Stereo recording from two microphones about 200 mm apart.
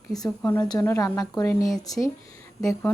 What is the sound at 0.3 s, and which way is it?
Speech, 10° left (ahead or behind).